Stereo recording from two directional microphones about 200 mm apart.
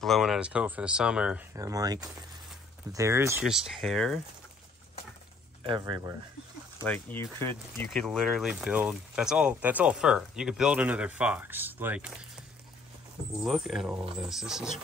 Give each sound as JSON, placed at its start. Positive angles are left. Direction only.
{"t": 0.0, "sound": "speech", "side_deg": 0}
{"t": 3.3, "sound": "speech", "side_deg": -5}
{"t": 5.6, "sound": "speech", "side_deg": -25}
{"t": 6.8, "sound": "speech", "side_deg": 10}
{"t": 13.4, "sound": "speech", "side_deg": 0}